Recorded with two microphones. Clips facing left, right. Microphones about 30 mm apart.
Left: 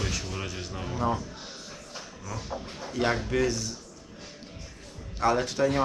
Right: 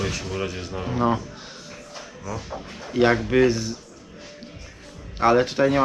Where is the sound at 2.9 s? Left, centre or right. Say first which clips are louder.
Right 8 dB; right.